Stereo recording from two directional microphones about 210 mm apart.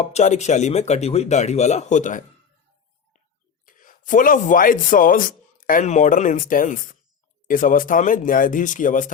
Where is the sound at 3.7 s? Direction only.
40° left (ahead or behind).